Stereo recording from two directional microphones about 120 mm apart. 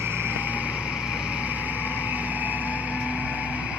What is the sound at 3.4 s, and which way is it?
Music, 10° right (ahead or behind).